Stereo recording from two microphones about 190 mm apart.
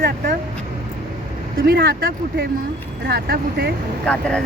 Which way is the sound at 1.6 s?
55° right (ahead or behind).